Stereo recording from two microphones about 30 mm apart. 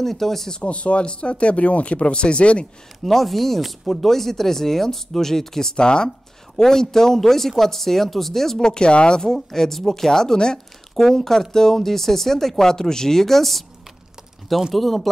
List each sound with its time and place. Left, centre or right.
0.0 s speech: centre
0.7 s speech: left
3.0 s speech: centre
5.8 s speech: left
6.0 s speech: centre
8.6 s speech: left
9.2 s speech: centre
14.7 s speech: centre